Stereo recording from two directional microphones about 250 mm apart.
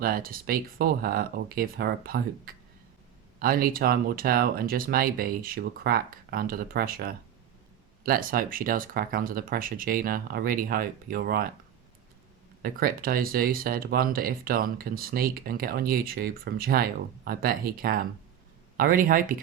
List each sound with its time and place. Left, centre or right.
0.0 s speech: right
12.6 s speech: right